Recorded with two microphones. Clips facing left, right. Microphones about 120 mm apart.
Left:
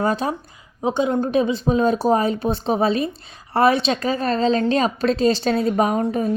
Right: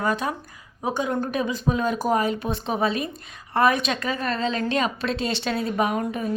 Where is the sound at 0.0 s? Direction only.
30° left (ahead or behind).